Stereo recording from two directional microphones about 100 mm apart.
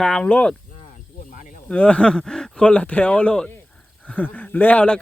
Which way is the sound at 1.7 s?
10° left (ahead or behind).